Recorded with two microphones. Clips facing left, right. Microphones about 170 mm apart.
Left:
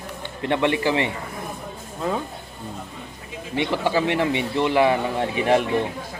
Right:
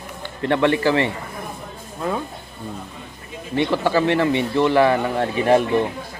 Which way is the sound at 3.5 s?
15° left (ahead or behind).